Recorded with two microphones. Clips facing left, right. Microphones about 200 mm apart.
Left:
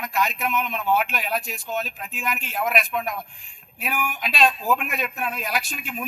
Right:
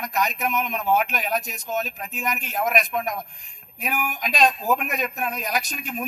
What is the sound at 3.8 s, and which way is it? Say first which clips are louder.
Speech: even; 40° right (ahead or behind).